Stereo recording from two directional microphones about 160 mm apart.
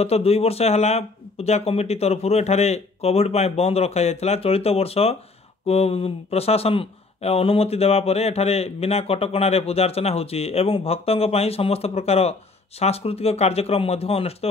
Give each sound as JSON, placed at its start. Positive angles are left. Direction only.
{"t": 0.0, "sound": "speech", "side_deg": 40}